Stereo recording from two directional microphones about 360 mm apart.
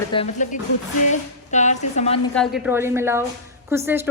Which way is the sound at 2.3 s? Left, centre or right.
Centre.